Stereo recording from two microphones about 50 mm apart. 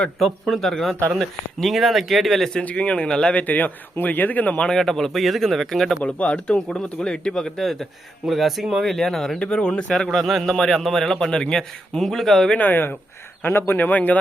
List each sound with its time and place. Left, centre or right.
0.5 s speech: centre
2.6 s speech: left
3.4 s speech: left
4.6 s speech: centre
6.0 s speech: left
7.6 s speech: centre
8.8 s speech: centre
9.4 s a man's voice: centre
10.2 s a man's voice: centre
12.5 s speech: left
13.7 s speech: left